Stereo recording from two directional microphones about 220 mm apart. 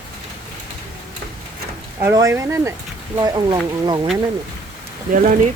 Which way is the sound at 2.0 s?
10° right (ahead or behind).